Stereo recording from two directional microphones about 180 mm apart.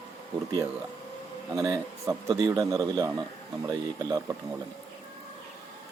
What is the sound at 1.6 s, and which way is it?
A man's voice, 15° right (ahead or behind).